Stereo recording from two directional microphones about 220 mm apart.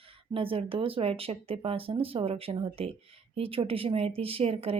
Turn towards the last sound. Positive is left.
turn(degrees=-25)  # may be behind; listen again after turning